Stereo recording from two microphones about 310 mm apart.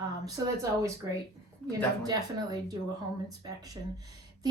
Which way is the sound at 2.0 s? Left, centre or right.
Centre.